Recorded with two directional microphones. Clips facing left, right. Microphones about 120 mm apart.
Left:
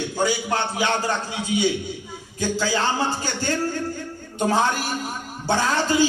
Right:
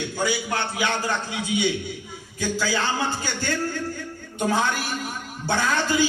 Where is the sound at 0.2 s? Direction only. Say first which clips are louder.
Left 3 dB; 30° left (ahead or behind).